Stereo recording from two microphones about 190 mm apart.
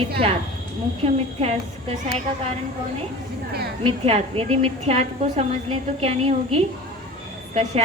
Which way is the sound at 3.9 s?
30° right (ahead or behind).